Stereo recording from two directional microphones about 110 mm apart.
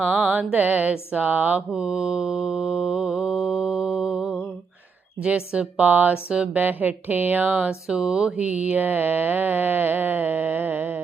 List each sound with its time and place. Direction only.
0.0 s mantra: 15° right (ahead or behind)
5.2 s speech: 10° right (ahead or behind)